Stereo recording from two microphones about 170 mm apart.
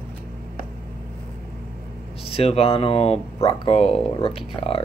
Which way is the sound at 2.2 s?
35° left (ahead or behind).